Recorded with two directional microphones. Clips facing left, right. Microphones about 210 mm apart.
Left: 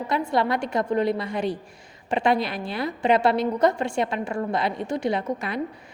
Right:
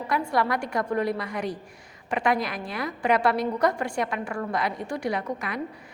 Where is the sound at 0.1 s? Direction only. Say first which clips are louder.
Left 2 dB; 25° left (ahead or behind).